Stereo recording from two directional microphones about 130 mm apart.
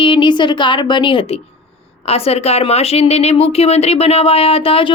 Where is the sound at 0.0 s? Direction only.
40° left (ahead or behind).